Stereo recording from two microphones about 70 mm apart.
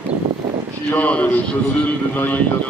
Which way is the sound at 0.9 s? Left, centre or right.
Left.